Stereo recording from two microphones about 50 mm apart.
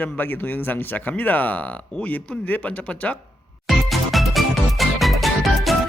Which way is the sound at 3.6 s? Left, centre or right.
Centre.